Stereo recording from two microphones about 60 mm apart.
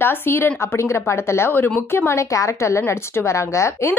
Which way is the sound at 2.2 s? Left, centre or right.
Left.